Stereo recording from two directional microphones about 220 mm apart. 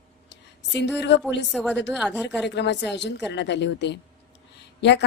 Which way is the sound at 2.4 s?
50° left (ahead or behind).